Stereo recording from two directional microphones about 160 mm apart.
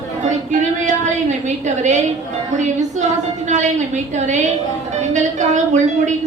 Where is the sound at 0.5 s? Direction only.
50° right (ahead or behind).